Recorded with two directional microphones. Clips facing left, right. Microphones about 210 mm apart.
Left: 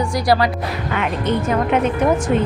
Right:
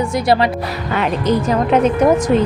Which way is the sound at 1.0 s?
35° right (ahead or behind).